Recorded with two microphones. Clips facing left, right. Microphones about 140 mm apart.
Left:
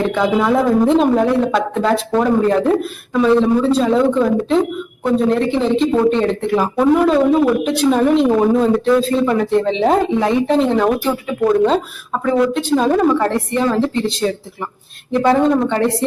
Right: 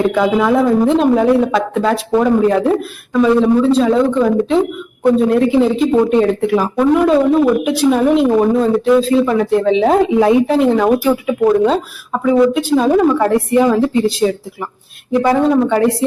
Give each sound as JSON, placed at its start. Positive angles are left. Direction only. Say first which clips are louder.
{"t": 0.1, "sound": "a woman's voice", "louder": "right 2 dB", "side_deg": 0}